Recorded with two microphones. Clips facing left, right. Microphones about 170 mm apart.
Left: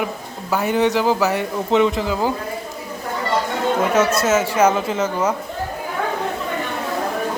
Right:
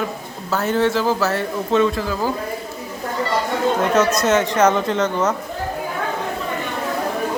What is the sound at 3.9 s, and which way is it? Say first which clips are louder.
Speech: even; 5° left (ahead or behind).